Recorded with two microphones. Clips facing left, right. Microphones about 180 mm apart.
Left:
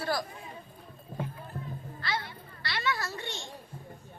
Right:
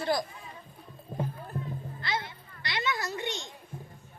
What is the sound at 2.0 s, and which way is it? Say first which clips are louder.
Children playing: even; 20° right (ahead or behind).